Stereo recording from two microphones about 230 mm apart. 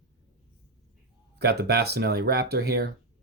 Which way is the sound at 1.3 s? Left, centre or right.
Right.